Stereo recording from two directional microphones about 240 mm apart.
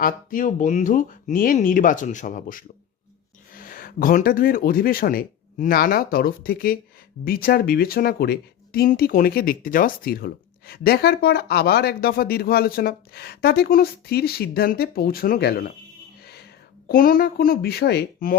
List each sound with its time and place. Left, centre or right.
0.0 s speech: left
16.2 s whispering: left
16.9 s speech: left